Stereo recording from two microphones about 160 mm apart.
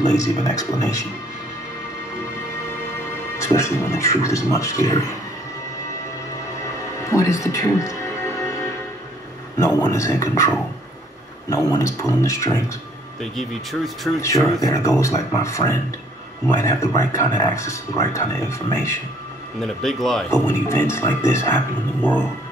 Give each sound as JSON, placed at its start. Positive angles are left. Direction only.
{"t": 0.1, "sound": "speech", "side_deg": 20}
{"t": 3.3, "sound": "speech", "side_deg": 15}
{"t": 7.1, "sound": "speech", "side_deg": 20}
{"t": 9.6, "sound": "speech", "side_deg": 15}
{"t": 11.5, "sound": "speech", "side_deg": 20}
{"t": 13.2, "sound": "speech", "side_deg": 0}
{"t": 14.2, "sound": "speech", "side_deg": 20}
{"t": 19.6, "sound": "speech", "side_deg": 0}
{"t": 20.2, "sound": "speech", "side_deg": 15}